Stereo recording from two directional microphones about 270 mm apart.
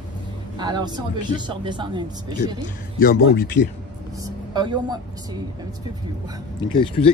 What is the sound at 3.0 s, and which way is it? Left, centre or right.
Speech, left.